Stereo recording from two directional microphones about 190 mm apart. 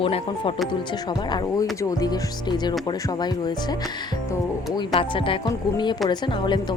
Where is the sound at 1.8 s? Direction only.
20° left (ahead or behind).